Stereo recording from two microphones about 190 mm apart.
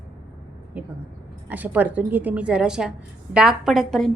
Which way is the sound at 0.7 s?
10° right (ahead or behind).